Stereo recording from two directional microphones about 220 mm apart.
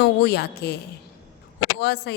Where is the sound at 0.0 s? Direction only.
50° left (ahead or behind).